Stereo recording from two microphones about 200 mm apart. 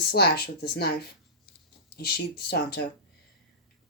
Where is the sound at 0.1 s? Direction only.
55° left (ahead or behind).